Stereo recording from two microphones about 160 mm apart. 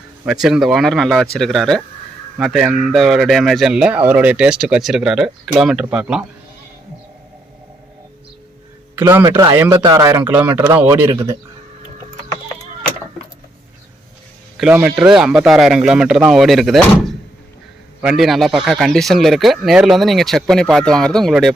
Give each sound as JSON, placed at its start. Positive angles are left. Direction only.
{"t": 0.3, "sound": "speech", "side_deg": -5}
{"t": 9.0, "sound": "speech", "side_deg": -15}
{"t": 14.6, "sound": "speech", "side_deg": -10}